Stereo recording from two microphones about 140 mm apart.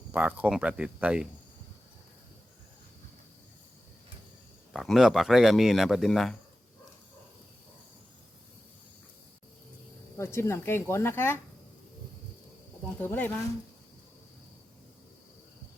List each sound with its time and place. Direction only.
0.1 s speech: 10° right (ahead or behind)
4.7 s speech: centre (ahead or behind)
10.2 s speech: 20° left (ahead or behind)
13.0 s speech: 15° left (ahead or behind)